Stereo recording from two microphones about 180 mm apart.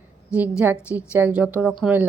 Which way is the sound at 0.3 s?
10° right (ahead or behind).